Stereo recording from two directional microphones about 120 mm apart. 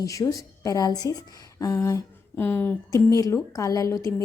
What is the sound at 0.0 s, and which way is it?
A woman's voice, 30° left (ahead or behind).